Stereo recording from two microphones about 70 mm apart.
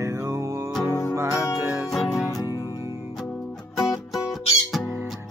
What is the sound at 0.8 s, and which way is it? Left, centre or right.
Music, left.